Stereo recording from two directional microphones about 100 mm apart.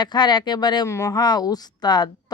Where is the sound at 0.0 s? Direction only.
45° left (ahead or behind).